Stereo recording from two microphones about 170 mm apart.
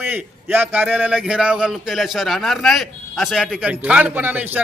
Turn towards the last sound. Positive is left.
turn(degrees=-10)  # may be behind; listen again after turning